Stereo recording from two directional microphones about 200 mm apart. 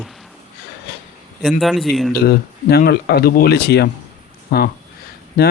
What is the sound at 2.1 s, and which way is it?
A man's voice, 50° left (ahead or behind).